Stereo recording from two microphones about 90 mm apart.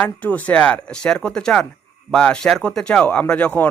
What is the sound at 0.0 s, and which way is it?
A man's voice, 15° left (ahead or behind).